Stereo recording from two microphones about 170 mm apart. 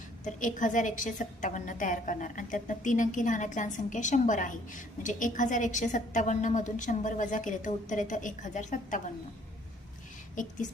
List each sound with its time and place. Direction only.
0.3 s a woman's voice: 50° left (ahead or behind)
10.4 s a woman's voice: 50° left (ahead or behind)